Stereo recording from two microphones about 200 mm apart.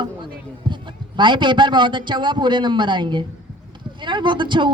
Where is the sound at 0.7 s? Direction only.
25° right (ahead or behind).